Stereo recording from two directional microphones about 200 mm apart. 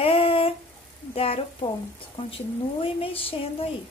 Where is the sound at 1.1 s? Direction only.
30° left (ahead or behind).